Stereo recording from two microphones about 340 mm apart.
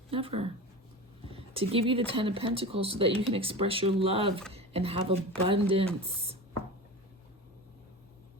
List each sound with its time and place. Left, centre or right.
0.1 s speech: centre